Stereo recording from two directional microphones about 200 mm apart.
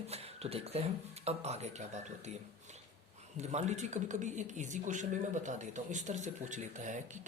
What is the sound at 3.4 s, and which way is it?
Speech, 35° right (ahead or behind).